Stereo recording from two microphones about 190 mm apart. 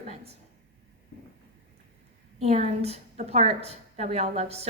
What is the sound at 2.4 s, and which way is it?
A woman's voice, 35° right (ahead or behind).